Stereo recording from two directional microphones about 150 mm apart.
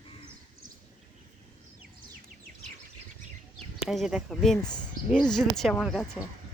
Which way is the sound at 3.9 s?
Centre (ahead or behind).